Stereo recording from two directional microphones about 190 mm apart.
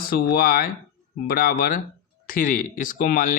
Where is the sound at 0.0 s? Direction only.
50° left (ahead or behind).